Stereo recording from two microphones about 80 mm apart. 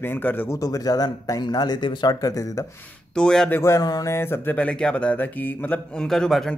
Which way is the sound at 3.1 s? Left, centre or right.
Centre.